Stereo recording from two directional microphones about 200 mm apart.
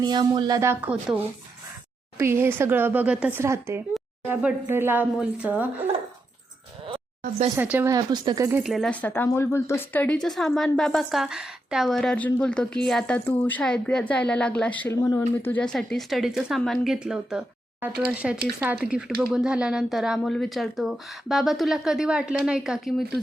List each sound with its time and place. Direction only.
0.0 s speech: 20° right (ahead or behind)
6.8 s a sound: 30° right (ahead or behind)
7.5 s speech: 10° right (ahead or behind)
8.5 s speech: centre (ahead or behind)